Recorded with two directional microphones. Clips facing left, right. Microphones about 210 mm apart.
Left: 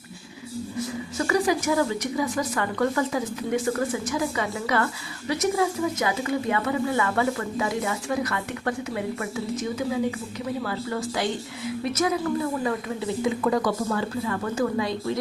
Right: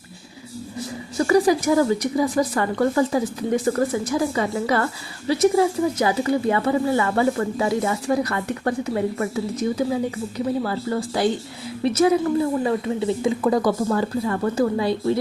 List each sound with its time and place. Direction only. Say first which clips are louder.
1.3 s a woman's voice: right 6 dB; 35° right (ahead or behind)